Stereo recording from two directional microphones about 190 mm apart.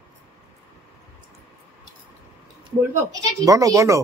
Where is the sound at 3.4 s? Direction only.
15° right (ahead or behind).